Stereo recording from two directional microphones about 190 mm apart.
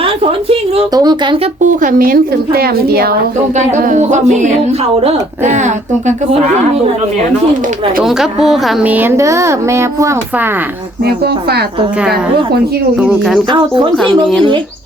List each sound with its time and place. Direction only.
0.0 s a woman's voice: 30° right (ahead or behind)
1.6 s a woman's voice: 45° right (ahead or behind)
3.8 s speech: 40° right (ahead or behind)
8.0 s speech: centre (ahead or behind)
11.0 s speech: 55° right (ahead or behind)
13.0 s speech: centre (ahead or behind)
13.5 s a woman's voice: 25° right (ahead or behind)
13.9 s speech: centre (ahead or behind)